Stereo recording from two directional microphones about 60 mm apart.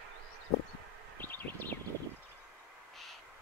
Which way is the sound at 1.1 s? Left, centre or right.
Left.